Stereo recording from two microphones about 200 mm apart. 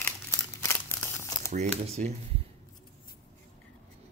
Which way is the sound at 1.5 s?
35° right (ahead or behind).